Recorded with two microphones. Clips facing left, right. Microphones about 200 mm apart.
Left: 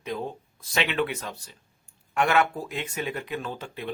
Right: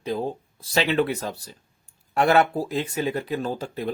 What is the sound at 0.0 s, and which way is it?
Speech, 35° right (ahead or behind).